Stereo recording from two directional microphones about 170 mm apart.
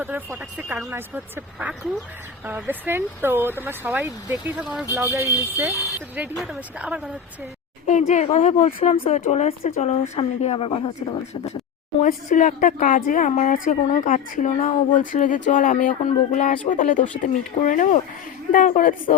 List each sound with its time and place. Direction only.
0.0 s speech: 15° right (ahead or behind)
6.3 s speech: centre (ahead or behind)
7.9 s a woman's voice: 45° left (ahead or behind); by 11.2 s 30° left (ahead or behind)
12.0 s a woman's voice: 50° left (ahead or behind)